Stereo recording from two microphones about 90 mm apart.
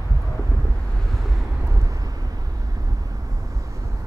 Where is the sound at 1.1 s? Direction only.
Centre (ahead or behind).